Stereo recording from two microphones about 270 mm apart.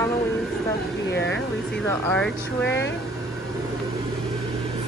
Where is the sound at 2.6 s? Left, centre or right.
Left.